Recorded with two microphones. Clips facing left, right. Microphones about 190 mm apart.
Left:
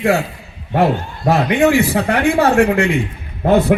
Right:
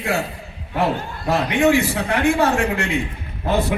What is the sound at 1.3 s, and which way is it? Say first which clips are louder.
A man's voice: left 4 dB; 60° left (ahead or behind).